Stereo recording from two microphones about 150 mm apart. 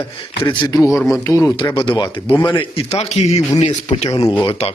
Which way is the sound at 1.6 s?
30° left (ahead or behind).